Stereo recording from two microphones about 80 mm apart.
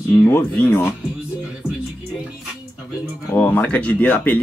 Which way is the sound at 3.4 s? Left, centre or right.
Centre.